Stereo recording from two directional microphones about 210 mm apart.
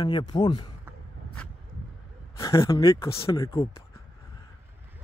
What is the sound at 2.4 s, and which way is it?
A man's voice, 15° left (ahead or behind).